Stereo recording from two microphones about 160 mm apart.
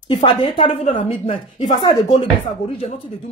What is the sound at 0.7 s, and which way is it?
Speech, 50° left (ahead or behind).